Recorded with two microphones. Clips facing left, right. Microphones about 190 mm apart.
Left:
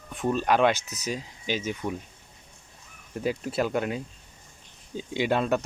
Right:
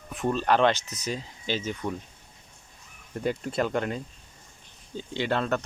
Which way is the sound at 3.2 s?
5° left (ahead or behind).